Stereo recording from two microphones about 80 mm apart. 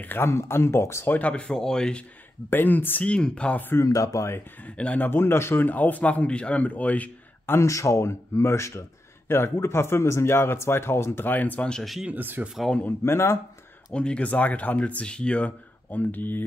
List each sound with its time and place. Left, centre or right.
0.0 s speech: left
1.1 s speech: centre
2.5 s speech: left
3.1 s speech: centre
3.8 s speech: left
4.6 s speech: centre
7.5 s speech: left; by 11.8 s centre
11.8 s speech: centre
12.1 s speech: right
13.0 s speech: left
13.9 s speech: centre